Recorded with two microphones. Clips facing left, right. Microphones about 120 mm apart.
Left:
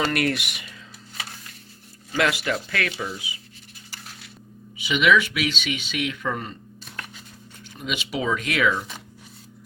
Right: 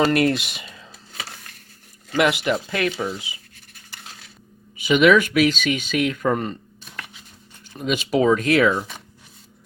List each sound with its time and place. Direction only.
0.1 s speech: 25° right (ahead or behind)
2.1 s speech: 20° right (ahead or behind)
4.8 s speech: 45° right (ahead or behind)
7.8 s speech: 45° right (ahead or behind)